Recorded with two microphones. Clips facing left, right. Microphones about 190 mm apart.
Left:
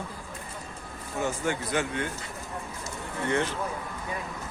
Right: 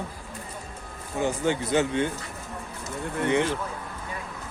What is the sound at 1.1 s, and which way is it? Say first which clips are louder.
Speech: right 4 dB; 20° right (ahead or behind).